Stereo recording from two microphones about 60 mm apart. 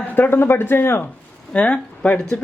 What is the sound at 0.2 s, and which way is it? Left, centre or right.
Speech, left.